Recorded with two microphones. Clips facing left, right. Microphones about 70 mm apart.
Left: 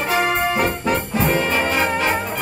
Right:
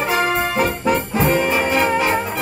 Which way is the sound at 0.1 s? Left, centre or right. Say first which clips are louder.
Left 1 dB; centre.